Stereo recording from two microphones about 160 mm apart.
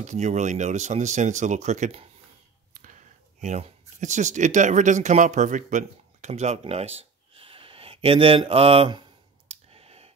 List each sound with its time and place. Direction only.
0.0 s speech: 45° right (ahead or behind)
2.7 s speech: 55° right (ahead or behind); by 9.0 s 35° right (ahead or behind)
9.5 s clicking: 40° right (ahead or behind)